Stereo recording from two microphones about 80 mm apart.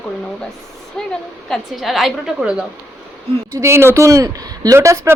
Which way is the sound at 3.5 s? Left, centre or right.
Right.